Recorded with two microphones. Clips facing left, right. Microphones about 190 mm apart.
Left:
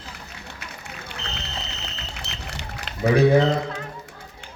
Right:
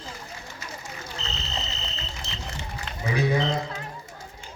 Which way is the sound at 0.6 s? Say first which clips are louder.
Right 1 dB; 65° left (ahead or behind).